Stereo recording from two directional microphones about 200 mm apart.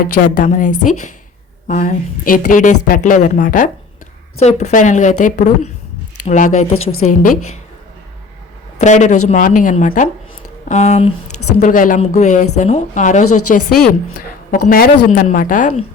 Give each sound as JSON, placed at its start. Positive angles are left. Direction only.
{"t": 0.0, "sound": "a woman's voice", "side_deg": 40}
{"t": 6.7, "sound": "a woman's voice", "side_deg": 90}
{"t": 7.1, "sound": "a woman's voice", "side_deg": 40}
{"t": 8.8, "sound": "a woman's voice", "side_deg": 35}
{"t": 11.3, "sound": "a sound", "side_deg": 90}
{"t": 11.6, "sound": "a woman's voice", "side_deg": 40}